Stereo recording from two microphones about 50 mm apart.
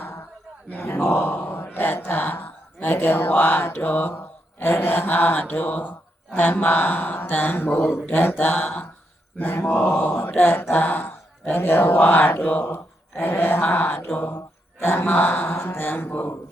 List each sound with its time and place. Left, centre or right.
0.7 s speech: left
11.9 s speech: left
15.1 s speech: left
15.5 s speech: left